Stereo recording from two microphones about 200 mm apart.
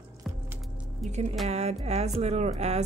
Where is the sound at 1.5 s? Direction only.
30° right (ahead or behind).